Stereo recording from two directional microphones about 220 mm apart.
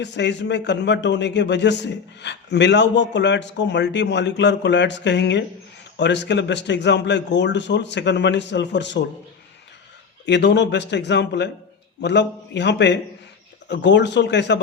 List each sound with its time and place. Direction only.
0.0 s a man's voice: 50° left (ahead or behind)
10.2 s a man's voice: 50° left (ahead or behind)